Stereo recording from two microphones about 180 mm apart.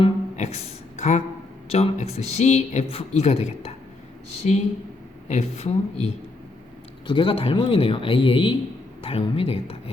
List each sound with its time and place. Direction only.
0.0 s a sound: 35° left (ahead or behind)
1.7 s speech: 35° left (ahead or behind)
7.1 s speech: 30° left (ahead or behind)